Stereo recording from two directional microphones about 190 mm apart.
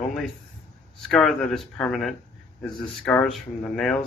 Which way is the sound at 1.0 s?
Centre (ahead or behind).